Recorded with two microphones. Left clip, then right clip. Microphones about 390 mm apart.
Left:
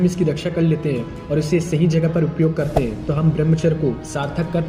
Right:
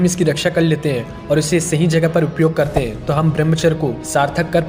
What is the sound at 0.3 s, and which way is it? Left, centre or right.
Speech, right.